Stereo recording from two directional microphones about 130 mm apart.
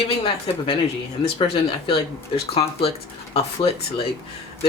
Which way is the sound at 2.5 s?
50° left (ahead or behind).